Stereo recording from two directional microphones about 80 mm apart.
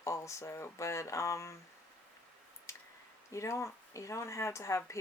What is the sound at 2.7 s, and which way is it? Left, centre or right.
Clicking, left.